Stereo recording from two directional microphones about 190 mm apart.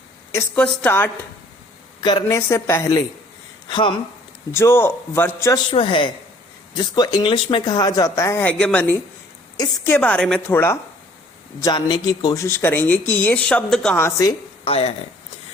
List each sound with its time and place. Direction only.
0.3 s speech: 10° left (ahead or behind)
2.0 s speech: 20° left (ahead or behind)
4.5 s speech: 15° left (ahead or behind)
5.7 s speech: 25° left (ahead or behind); by 10.8 s 10° left (ahead or behind)
11.6 s speech: 25° left (ahead or behind); by 14.1 s 5° left (ahead or behind)
14.6 s speech: 30° left (ahead or behind)